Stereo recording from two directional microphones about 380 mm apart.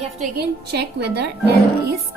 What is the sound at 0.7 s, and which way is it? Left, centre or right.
Speech, right.